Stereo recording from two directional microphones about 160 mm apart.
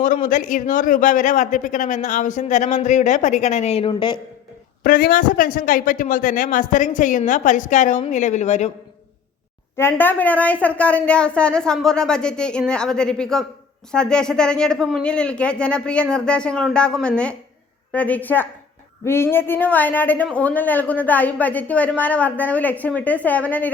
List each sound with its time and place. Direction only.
0.0 s a man's voice: 55° left (ahead or behind); by 4.2 s 30° left (ahead or behind)
4.8 s a man's voice: 65° left (ahead or behind); by 8.7 s 45° left (ahead or behind)
9.7 s a woman's voice: 15° left (ahead or behind)